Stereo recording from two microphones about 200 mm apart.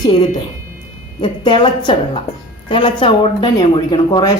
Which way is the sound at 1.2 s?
25° left (ahead or behind).